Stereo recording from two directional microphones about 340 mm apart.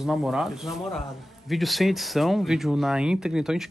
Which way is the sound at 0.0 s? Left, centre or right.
Centre.